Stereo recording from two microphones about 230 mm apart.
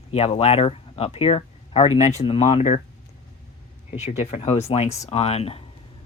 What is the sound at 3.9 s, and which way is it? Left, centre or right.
Speech, left.